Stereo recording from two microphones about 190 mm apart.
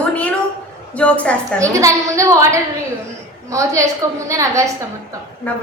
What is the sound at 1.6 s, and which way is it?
A woman's voice, 15° right (ahead or behind).